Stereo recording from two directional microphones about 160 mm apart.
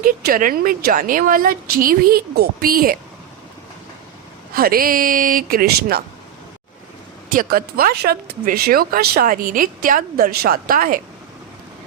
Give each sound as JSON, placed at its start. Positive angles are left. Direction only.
{"t": 0.0, "sound": "speech", "side_deg": -60}
{"t": 4.5, "sound": "speech", "side_deg": -65}
{"t": 7.3, "sound": "speech", "side_deg": -60}